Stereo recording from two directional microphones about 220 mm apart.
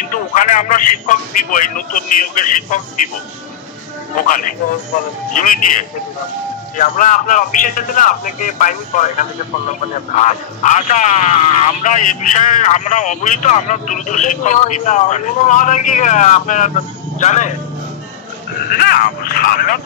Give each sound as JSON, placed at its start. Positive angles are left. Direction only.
{"t": 0.1, "sound": "speech", "side_deg": 35}
{"t": 4.1, "sound": "speech", "side_deg": 35}
{"t": 10.1, "sound": "speech", "side_deg": 35}
{"t": 18.7, "sound": "speech", "side_deg": 45}